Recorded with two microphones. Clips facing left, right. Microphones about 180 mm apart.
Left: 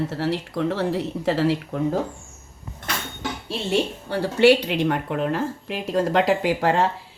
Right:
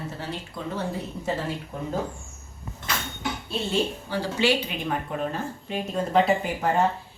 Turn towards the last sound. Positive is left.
turn(degrees=85)